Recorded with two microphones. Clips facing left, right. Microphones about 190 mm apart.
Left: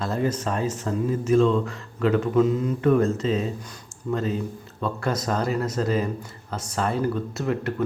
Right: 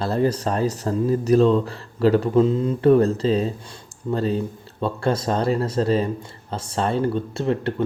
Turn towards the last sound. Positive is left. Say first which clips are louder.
# right 3 dB
turn(degrees=-30)  # may be behind; listen again after turning